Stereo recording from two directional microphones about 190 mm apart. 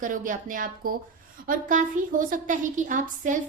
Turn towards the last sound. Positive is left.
turn(degrees=-40)  # may be behind; listen again after turning